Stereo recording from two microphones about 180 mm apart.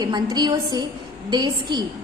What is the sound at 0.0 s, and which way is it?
A woman's voice, 25° right (ahead or behind).